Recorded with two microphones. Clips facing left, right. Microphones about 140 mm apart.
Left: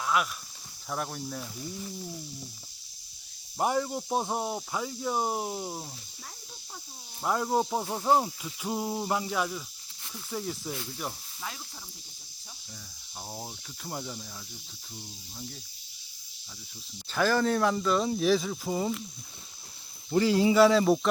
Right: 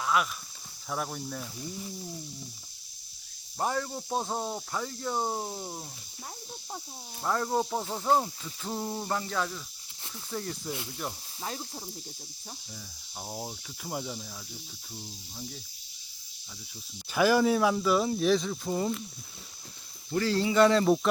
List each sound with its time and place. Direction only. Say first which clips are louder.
0.0 s a sound: even; centre (ahead or behind)
0.9 s speech: even; centre (ahead or behind)
3.6 s cricket: left 3 dB; 15° left (ahead or behind)
7.2 s cricket: left 1 dB; 10° left (ahead or behind)
10.3 s speech: left 1 dB; 5° left (ahead or behind)
13.3 s speech: right 4 dB; 5° right (ahead or behind)
17.1 s speech: right 2 dB; 10° right (ahead or behind)
20.1 s cricket: left 4 dB; 15° left (ahead or behind)
20.6 s speech: right 1 dB; centre (ahead or behind)